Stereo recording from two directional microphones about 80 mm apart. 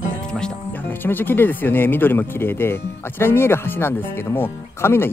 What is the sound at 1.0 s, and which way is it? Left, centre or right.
Speech, left.